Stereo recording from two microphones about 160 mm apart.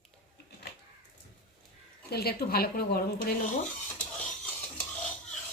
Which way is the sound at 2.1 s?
80° left.